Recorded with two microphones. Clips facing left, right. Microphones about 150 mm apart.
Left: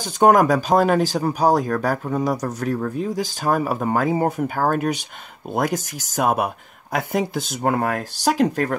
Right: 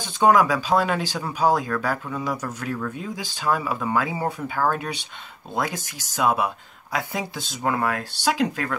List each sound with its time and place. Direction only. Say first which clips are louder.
0.0 s speech: left 3 dB; 50° left (ahead or behind)